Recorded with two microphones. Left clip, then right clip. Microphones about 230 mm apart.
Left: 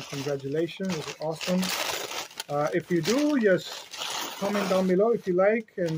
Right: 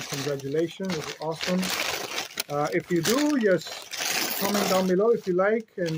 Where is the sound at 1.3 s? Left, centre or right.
Right.